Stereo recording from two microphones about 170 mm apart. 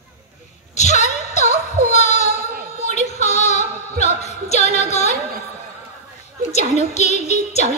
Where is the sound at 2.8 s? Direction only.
40° left (ahead or behind).